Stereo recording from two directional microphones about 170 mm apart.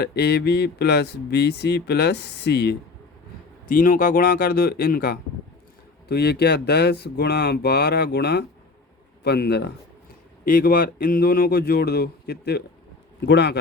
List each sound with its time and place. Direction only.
0.0 s speech: 70° left (ahead or behind)
3.7 s speech: 55° left (ahead or behind)
6.1 s speech: 70° left (ahead or behind)
10.4 s speech: 60° left (ahead or behind); by 13.6 s 80° left